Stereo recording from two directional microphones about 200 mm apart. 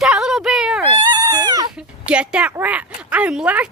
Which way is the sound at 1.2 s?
20° right (ahead or behind).